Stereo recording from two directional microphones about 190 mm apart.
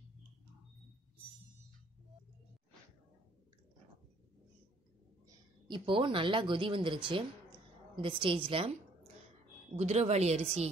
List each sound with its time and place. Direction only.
5.7 s a woman's voice: 25° right (ahead or behind)